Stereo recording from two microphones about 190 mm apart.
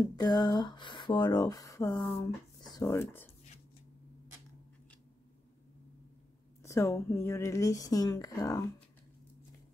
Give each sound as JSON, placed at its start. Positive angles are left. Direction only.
{"t": 0.0, "sound": "speech", "side_deg": 20}
{"t": 6.6, "sound": "speech", "side_deg": 15}